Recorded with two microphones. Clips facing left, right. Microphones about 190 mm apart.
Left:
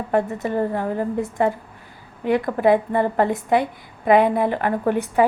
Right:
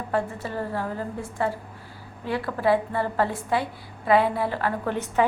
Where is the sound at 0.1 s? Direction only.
20° left (ahead or behind).